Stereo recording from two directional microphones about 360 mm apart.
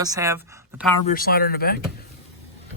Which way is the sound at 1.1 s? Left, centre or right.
Left.